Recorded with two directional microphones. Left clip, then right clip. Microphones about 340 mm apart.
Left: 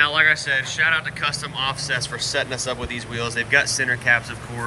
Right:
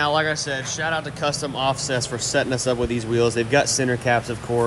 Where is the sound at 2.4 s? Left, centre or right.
Right.